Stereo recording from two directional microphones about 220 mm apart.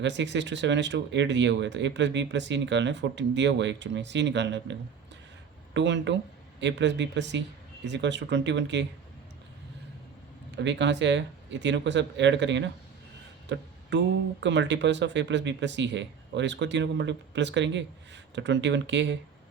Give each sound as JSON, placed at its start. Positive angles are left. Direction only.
{"t": 0.0, "sound": "speech", "side_deg": -55}
{"t": 10.5, "sound": "speech", "side_deg": -55}